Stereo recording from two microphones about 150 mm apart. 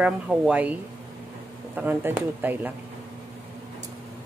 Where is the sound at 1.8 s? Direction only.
10° right (ahead or behind).